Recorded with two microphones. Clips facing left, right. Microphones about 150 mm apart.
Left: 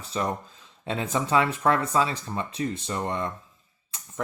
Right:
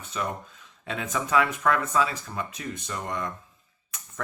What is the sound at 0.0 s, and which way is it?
Speech, 35° left (ahead or behind).